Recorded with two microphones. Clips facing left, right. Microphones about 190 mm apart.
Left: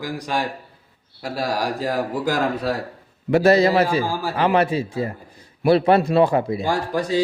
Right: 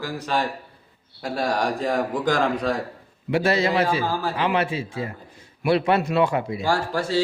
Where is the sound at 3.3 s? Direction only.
40° left (ahead or behind).